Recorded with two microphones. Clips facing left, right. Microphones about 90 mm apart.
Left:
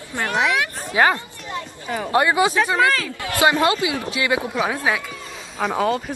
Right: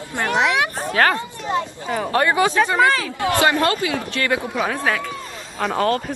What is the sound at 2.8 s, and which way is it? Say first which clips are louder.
Speech: right 2 dB; 25° right (ahead or behind).